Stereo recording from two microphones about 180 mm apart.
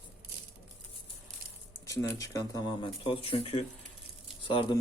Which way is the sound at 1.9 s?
20° left (ahead or behind).